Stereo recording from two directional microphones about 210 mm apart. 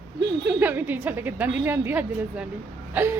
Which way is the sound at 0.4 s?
10° right (ahead or behind).